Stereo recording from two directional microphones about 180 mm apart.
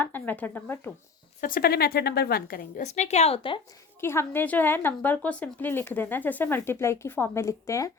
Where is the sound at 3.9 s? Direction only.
15° left (ahead or behind).